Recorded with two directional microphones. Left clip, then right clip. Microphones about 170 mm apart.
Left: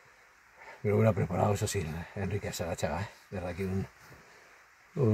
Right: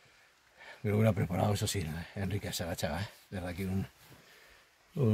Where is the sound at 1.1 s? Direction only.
5° left (ahead or behind).